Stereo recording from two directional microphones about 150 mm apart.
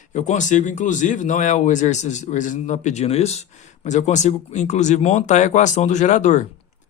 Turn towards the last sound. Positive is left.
turn(degrees=55)  # may be behind; listen again after turning